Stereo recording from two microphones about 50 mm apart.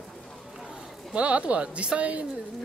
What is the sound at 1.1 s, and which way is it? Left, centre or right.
Speech, right.